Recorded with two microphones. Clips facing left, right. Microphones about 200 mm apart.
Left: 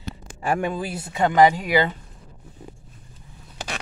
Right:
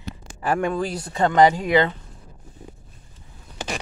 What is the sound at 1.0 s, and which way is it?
Speech, 20° left (ahead or behind).